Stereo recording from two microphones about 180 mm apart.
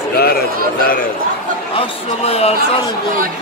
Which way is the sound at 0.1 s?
60° left (ahead or behind).